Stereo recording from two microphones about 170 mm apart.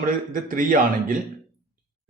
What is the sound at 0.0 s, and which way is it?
A man's voice, 55° right (ahead or behind).